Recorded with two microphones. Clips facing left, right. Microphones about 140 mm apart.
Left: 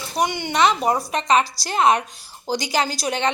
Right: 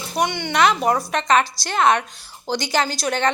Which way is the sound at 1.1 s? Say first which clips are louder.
Even; 35° left (ahead or behind).